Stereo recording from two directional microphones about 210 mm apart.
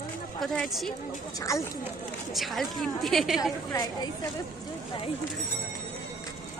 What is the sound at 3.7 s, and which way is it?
Speech, 20° left (ahead or behind).